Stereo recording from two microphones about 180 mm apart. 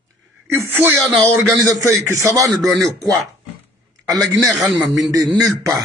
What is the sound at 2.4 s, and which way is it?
Speech, centre (ahead or behind).